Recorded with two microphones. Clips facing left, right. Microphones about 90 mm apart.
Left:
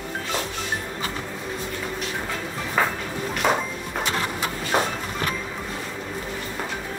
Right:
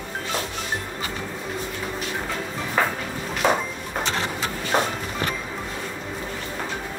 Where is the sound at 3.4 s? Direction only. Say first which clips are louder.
Right 1 dB; 20° right (ahead or behind).